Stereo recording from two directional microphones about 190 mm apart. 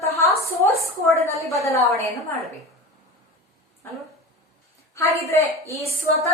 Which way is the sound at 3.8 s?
10° left (ahead or behind).